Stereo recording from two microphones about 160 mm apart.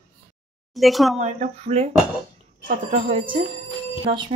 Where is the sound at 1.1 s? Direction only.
45° right (ahead or behind).